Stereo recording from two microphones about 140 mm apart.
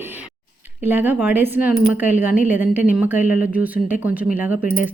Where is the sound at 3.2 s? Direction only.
75° left (ahead or behind).